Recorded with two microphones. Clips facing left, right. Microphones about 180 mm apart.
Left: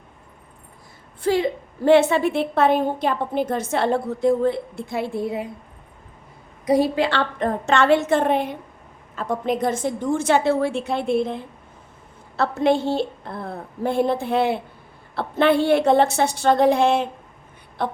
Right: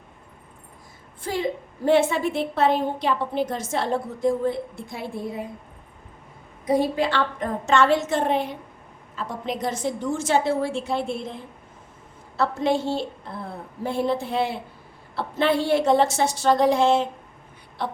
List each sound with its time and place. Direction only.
1.2 s a woman's voice: 70° left (ahead or behind)
6.7 s a woman's voice: 80° left; by 11.3 s 60° left (ahead or behind)
12.4 s a woman's voice: 60° left (ahead or behind)
17.8 s a sound: 50° left (ahead or behind)